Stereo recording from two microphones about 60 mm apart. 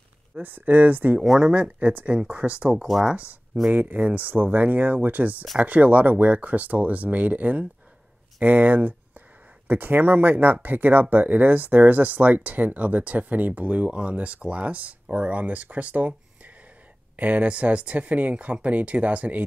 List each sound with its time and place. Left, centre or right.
0.3 s speech: right
2.9 s speech: centre
3.7 s speech: right